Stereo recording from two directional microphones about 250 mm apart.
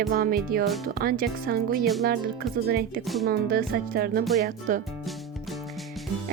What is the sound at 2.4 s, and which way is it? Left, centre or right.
Speech, centre.